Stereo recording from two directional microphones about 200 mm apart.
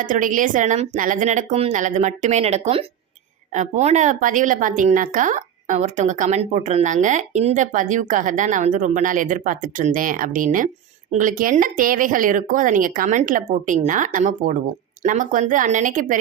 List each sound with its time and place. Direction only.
0.0 s a woman's voice: 40° right (ahead or behind)